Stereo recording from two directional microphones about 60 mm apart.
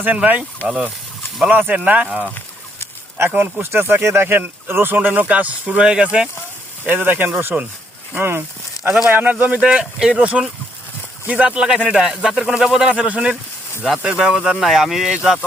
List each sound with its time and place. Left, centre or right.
1.5 s speech: right
3.2 s speech: right; by 6.2 s centre
6.8 s speech: right
9.0 s speech: right
9.6 s speech: centre